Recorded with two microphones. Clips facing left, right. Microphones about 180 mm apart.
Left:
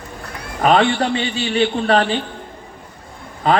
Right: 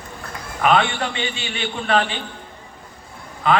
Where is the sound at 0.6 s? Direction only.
35° left (ahead or behind).